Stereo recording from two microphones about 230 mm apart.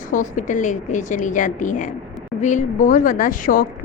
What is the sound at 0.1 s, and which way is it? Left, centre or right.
A woman's voice, left.